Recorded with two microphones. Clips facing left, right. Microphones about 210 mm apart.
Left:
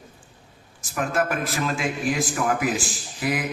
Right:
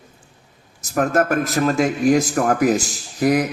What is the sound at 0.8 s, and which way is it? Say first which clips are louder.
A man's voice: right 6 dB; 40° right (ahead or behind).